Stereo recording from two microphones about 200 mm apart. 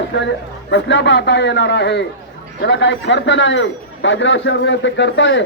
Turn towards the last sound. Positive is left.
turn(degrees=65)  # may be behind; listen again after turning